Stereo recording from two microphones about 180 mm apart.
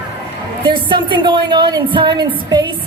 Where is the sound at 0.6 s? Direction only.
25° right (ahead or behind).